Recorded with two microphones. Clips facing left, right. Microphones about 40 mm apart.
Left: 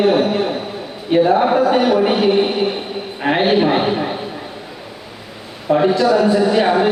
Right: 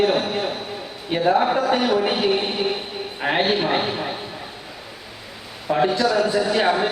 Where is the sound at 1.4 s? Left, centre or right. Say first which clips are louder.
Left 6 dB; centre.